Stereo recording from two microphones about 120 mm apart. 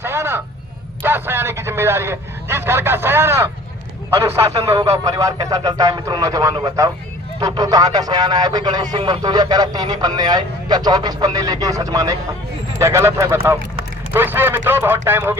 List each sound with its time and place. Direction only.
0.0 s vehicle: 20° right (ahead or behind)
1.0 s a man's voice: 20° right (ahead or behind)